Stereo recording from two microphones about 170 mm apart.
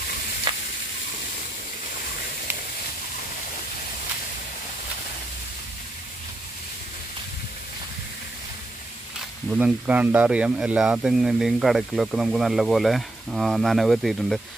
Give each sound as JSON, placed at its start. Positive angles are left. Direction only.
{"t": 0.5, "sound": "frying", "side_deg": -25}
{"t": 9.5, "sound": "speech", "side_deg": -10}